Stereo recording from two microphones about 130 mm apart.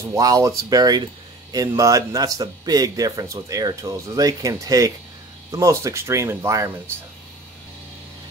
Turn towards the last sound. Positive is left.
turn(degrees=-20)  # may be behind; listen again after turning